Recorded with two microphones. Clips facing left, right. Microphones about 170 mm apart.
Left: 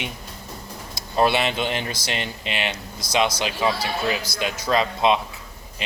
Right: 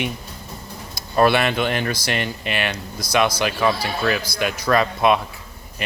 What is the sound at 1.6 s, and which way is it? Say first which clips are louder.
Speech: right 4 dB; 20° left (ahead or behind).